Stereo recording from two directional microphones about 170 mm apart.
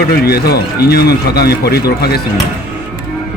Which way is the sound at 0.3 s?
65° left (ahead or behind).